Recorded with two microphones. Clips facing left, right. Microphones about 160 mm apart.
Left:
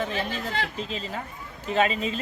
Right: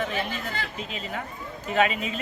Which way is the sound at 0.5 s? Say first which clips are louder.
Left 4 dB; 80° left.